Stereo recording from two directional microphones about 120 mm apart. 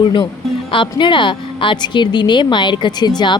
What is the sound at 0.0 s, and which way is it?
Speech, 40° left (ahead or behind).